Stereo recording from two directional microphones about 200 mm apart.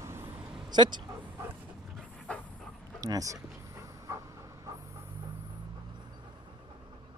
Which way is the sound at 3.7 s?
15° right (ahead or behind).